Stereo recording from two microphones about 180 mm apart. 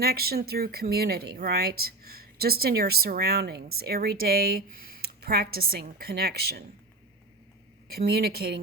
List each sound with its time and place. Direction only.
0.0 s speech: 60° right (ahead or behind)
7.9 s speech: 60° right (ahead or behind)